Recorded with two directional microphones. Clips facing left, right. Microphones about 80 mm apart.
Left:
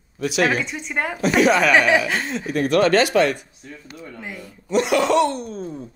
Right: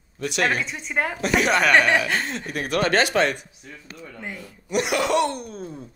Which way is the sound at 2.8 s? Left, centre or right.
Right.